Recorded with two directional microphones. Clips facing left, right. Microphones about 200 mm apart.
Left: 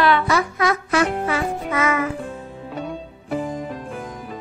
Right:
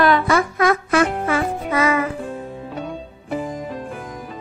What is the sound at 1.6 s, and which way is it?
Music, 35° right (ahead or behind).